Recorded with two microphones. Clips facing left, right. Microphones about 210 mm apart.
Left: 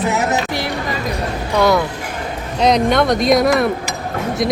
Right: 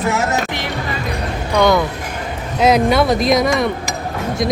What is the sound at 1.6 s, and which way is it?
Speech, 5° left (ahead or behind).